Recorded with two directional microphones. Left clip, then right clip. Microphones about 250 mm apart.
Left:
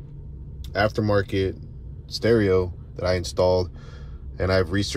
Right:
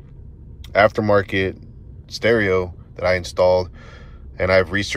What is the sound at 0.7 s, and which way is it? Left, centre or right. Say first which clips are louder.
Speech: right 7 dB; centre.